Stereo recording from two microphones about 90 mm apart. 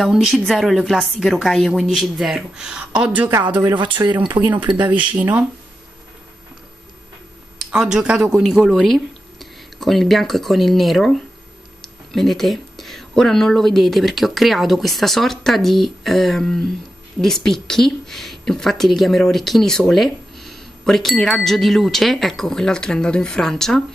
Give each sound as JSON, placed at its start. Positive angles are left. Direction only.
{"t": 0.0, "sound": "a woman's voice", "side_deg": -5}
{"t": 3.6, "sound": "speech", "side_deg": -60}
{"t": 5.1, "sound": "speech", "side_deg": -15}
{"t": 7.5, "sound": "a woman's voice", "side_deg": -5}